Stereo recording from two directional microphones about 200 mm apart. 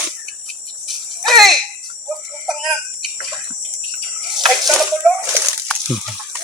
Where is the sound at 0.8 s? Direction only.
Centre (ahead or behind).